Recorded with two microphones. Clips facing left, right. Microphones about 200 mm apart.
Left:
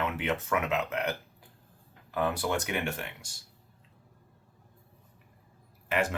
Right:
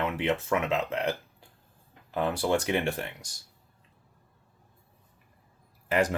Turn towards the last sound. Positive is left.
turn(degrees=-35)  # may be behind; listen again after turning